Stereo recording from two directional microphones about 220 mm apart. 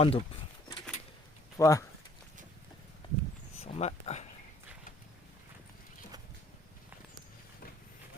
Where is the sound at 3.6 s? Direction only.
30° left (ahead or behind).